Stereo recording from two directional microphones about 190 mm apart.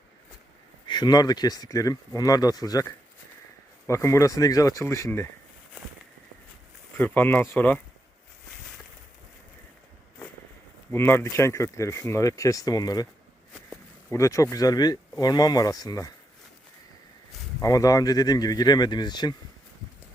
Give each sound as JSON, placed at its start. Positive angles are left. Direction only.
{"t": 0.9, "sound": "speech", "side_deg": 20}
{"t": 6.9, "sound": "speech", "side_deg": 10}
{"t": 10.9, "sound": "speech", "side_deg": 10}
{"t": 14.1, "sound": "speech", "side_deg": 15}
{"t": 17.6, "sound": "speech", "side_deg": 20}